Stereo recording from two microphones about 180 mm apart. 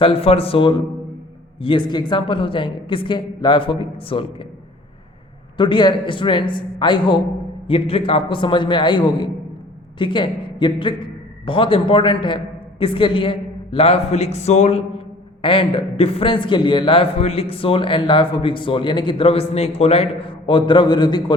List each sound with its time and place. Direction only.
0.0 s a man's voice: 30° left (ahead or behind)
5.5 s a man's voice: 25° left (ahead or behind)